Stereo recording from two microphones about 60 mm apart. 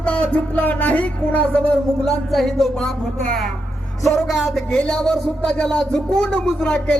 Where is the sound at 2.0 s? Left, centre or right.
Centre.